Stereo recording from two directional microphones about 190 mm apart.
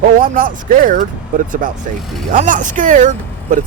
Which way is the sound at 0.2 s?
50° right (ahead or behind).